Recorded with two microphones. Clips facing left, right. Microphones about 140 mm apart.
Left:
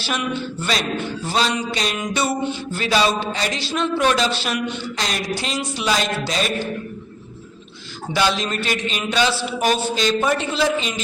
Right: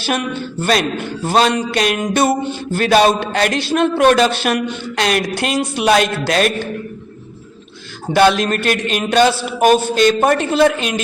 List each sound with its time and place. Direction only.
0.0 s a man's voice: 50° right (ahead or behind)
8.1 s a man's voice: 55° right (ahead or behind)